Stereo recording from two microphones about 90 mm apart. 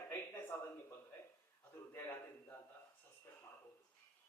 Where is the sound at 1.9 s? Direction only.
25° left (ahead or behind).